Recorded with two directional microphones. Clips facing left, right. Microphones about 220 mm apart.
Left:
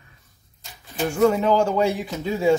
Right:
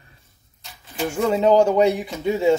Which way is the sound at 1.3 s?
20° right (ahead or behind).